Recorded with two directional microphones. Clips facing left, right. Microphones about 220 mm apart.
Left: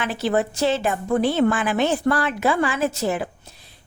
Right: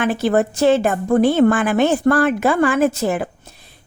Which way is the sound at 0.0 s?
50° right (ahead or behind).